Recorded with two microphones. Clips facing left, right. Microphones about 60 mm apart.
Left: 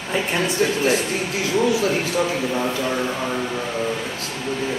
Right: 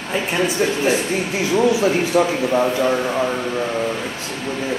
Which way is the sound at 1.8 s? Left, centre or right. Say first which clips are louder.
Right 4 dB; centre.